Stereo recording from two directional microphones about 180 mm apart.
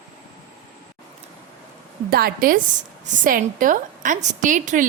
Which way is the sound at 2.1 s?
55° right (ahead or behind).